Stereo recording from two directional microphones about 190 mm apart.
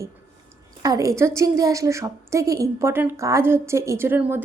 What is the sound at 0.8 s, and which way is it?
A woman's voice, 20° right (ahead or behind).